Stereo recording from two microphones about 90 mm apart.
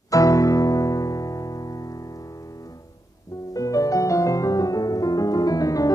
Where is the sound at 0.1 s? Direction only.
40° left (ahead or behind).